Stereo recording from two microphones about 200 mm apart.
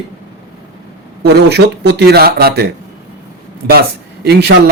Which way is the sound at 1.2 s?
55° right (ahead or behind).